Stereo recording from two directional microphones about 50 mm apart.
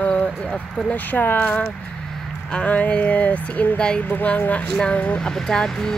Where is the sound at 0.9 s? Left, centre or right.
Left.